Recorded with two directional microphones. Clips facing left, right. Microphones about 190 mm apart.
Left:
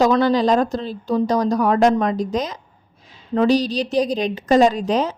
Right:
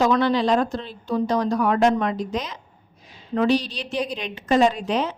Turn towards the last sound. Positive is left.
turn(degrees=40)  # may be behind; listen again after turning